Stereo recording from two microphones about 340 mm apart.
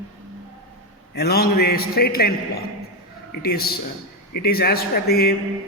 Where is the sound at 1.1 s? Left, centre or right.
Left.